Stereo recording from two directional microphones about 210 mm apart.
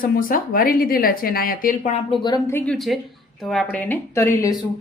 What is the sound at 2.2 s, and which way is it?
A woman's voice, 15° left (ahead or behind).